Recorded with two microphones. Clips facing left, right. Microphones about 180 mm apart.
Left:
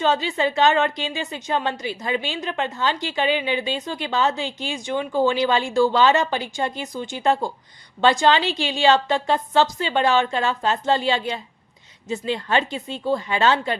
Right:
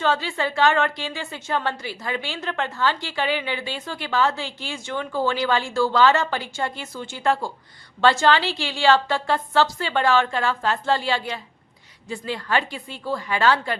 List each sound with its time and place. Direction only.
0.0 s a woman's voice: 20° left (ahead or behind)